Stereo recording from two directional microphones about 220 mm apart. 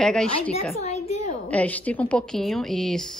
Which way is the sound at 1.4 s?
5° left (ahead or behind).